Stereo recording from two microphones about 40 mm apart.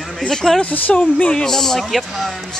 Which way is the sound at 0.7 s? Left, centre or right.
Left.